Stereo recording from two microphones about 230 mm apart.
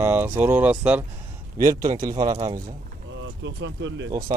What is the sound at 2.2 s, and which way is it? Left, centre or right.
Speech, right.